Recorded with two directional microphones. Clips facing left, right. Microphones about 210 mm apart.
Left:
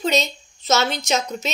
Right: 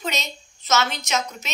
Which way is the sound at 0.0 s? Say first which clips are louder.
Left 8 dB; 35° left (ahead or behind).